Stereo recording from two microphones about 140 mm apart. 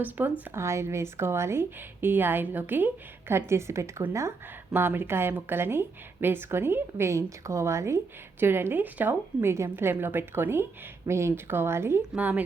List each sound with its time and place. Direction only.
0.2 s speech: 15° right (ahead or behind)